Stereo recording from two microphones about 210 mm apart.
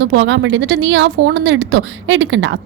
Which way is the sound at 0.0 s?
60° right (ahead or behind).